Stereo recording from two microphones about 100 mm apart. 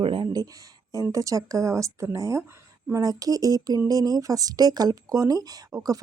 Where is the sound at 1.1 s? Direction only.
35° right (ahead or behind).